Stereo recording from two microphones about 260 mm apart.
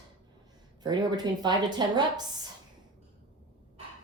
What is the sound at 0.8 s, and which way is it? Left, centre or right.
Speech, centre.